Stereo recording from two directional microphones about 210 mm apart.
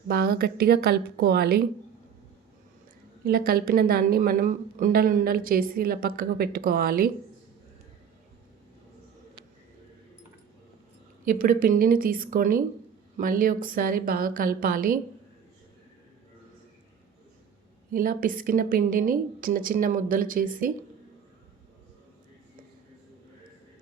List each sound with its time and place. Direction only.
0.1 s a woman's voice: 45° right (ahead or behind)
3.2 s a woman's voice: 45° right (ahead or behind)
11.3 s a woman's voice: 40° right (ahead or behind)
17.9 s a woman's voice: 40° right (ahead or behind)